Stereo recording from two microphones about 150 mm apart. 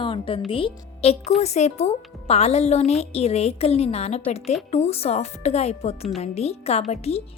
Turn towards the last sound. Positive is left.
turn(degrees=45)  # may be behind; listen again after turning